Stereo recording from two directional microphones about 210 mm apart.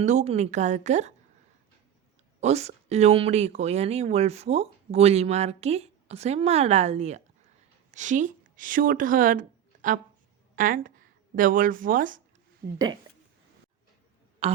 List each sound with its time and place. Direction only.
0.0 s speech: 35° right (ahead or behind)
2.4 s a woman's voice: 30° right (ahead or behind)